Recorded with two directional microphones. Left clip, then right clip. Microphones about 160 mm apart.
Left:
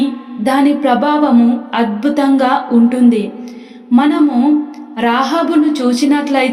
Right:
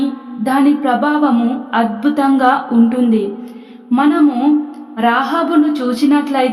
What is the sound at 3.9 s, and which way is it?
Music, 20° right (ahead or behind).